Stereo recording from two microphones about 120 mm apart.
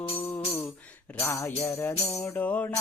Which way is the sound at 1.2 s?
20° left (ahead or behind).